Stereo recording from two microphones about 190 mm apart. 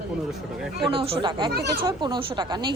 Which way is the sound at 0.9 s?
30° right (ahead or behind).